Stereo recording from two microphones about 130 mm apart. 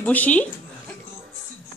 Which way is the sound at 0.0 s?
10° left (ahead or behind).